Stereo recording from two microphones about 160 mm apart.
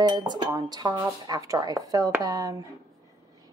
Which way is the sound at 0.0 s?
30° right (ahead or behind).